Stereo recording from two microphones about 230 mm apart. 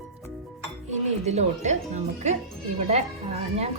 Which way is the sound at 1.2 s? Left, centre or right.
Right.